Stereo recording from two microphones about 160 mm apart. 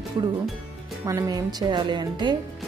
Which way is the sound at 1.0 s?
20° right (ahead or behind).